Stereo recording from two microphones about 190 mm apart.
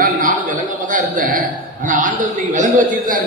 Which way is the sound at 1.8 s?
45° right (ahead or behind).